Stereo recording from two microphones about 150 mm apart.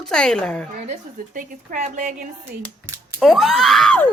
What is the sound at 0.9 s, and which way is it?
A woman's voice, 60° right (ahead or behind).